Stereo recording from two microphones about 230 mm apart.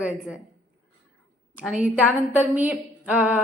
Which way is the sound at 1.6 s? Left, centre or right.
Centre.